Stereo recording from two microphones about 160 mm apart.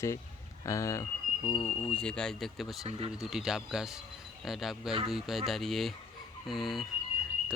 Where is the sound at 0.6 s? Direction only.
20° left (ahead or behind).